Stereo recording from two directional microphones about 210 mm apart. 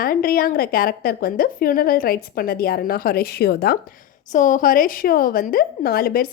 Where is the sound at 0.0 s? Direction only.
45° left (ahead or behind).